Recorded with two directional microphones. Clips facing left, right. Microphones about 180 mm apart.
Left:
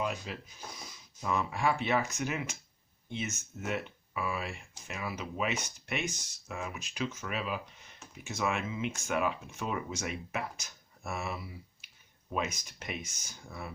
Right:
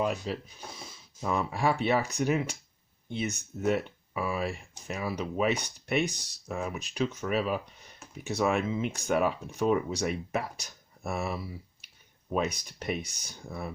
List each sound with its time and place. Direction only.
0.0 s speech: 35° right (ahead or behind)